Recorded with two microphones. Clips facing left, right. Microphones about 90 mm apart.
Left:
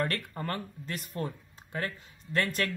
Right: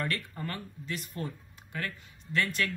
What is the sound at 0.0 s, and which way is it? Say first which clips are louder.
Speech: left 2 dB; 40° left (ahead or behind).